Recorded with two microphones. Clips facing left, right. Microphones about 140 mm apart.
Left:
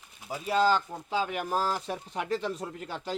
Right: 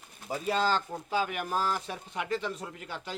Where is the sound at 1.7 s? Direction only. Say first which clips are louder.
Left 3 dB; centre (ahead or behind).